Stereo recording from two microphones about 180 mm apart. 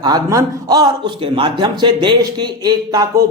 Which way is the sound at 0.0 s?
20° right (ahead or behind).